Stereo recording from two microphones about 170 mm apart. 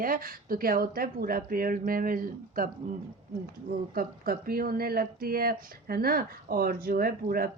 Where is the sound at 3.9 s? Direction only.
60° right (ahead or behind).